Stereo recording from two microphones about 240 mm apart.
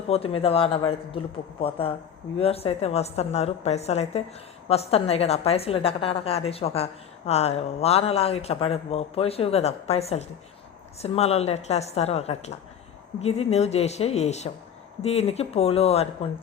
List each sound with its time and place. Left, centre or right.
0.1 s a woman's voice: left